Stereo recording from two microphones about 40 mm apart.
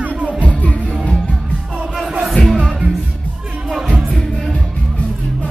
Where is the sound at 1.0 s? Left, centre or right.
Left.